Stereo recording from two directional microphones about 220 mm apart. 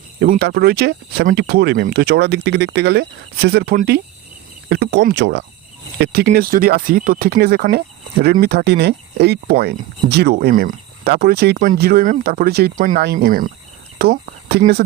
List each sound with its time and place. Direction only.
0.2 s speech: 45° right (ahead or behind)